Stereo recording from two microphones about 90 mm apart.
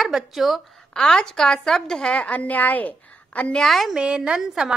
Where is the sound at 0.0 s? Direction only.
5° right (ahead or behind); by 3.6 s 15° left (ahead or behind).